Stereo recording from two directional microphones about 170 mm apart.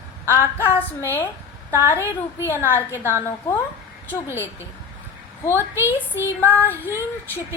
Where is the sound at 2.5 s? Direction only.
15° left (ahead or behind).